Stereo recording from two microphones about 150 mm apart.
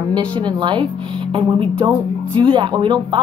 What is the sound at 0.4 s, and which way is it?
Speech, 30° right (ahead or behind).